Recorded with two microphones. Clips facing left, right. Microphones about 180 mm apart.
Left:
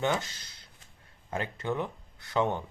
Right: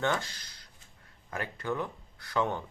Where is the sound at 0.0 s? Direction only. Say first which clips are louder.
Left 1 dB; 20° left (ahead or behind).